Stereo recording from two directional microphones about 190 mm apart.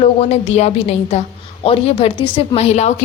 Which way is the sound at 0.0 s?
30° left (ahead or behind).